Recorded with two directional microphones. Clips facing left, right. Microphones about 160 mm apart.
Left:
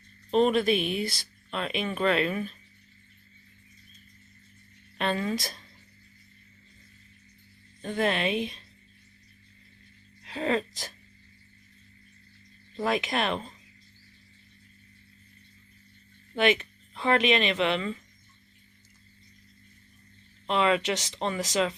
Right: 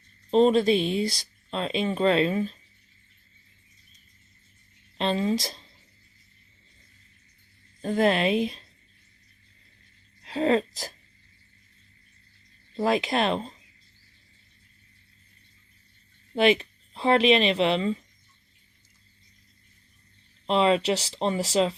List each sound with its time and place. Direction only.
0.3 s speech: 30° right (ahead or behind)
4.9 s speech: 25° right (ahead or behind)
7.8 s speech: 35° right (ahead or behind)
10.2 s speech: 35° right (ahead or behind)
12.7 s speech: 30° right (ahead or behind)
16.3 s speech: 35° right (ahead or behind)
20.5 s speech: 30° right (ahead or behind)